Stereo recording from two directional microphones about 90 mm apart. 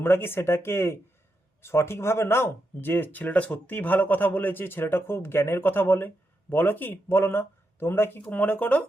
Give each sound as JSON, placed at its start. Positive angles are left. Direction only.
{"t": 0.0, "sound": "speech", "side_deg": 25}